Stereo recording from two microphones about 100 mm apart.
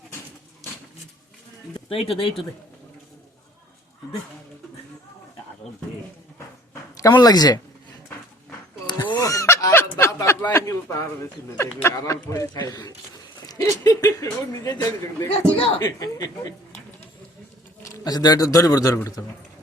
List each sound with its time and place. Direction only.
1.9 s speech: 65° left (ahead or behind)
7.1 s speech: 45° left (ahead or behind)
8.9 s a sound: 45° left (ahead or behind)
10.5 s speech: 30° left (ahead or behind)
12.5 s speech: 40° left (ahead or behind)
18.0 s speech: 40° left (ahead or behind)